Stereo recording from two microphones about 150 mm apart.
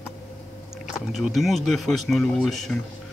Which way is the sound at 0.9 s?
5° right (ahead or behind).